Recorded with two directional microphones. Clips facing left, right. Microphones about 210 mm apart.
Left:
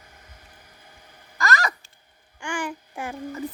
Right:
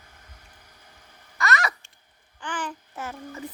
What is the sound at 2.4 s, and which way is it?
Speech, 10° left (ahead or behind).